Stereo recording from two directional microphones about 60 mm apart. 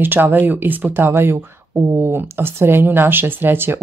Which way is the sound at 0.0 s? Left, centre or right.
Right.